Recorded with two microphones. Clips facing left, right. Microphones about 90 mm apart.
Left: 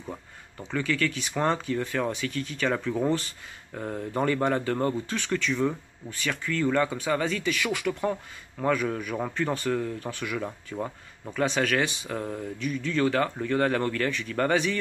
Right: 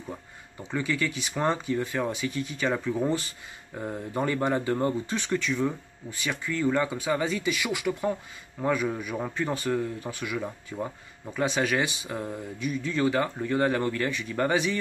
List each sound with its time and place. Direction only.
0.6 s speech: 15° right (ahead or behind)
5.4 s speech: 5° right (ahead or behind)
6.1 s speech: 15° right (ahead or behind)